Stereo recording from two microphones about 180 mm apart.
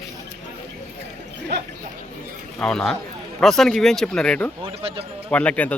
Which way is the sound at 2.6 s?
5° left (ahead or behind).